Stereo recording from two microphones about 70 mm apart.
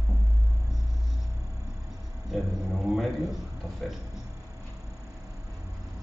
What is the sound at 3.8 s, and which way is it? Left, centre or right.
Speech, centre.